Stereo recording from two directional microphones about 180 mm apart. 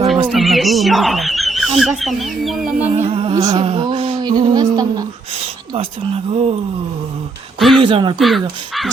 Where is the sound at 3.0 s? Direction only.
30° right (ahead or behind).